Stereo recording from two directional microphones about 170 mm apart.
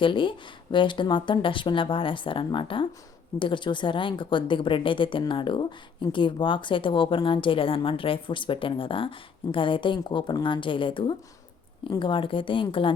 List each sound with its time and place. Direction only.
0.0 s a woman's voice: 30° left (ahead or behind)